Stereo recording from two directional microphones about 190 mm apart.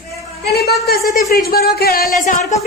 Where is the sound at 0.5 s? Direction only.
55° left (ahead or behind).